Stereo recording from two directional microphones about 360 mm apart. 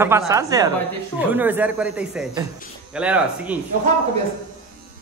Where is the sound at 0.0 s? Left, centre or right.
Centre.